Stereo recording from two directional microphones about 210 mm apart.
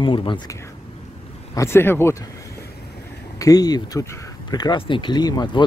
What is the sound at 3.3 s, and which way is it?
Speech, 15° left (ahead or behind).